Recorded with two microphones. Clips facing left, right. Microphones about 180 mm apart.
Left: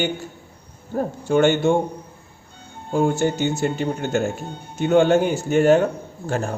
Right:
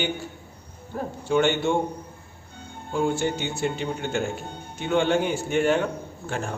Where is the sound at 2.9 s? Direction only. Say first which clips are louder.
Left 5 dB; 45° left (ahead or behind).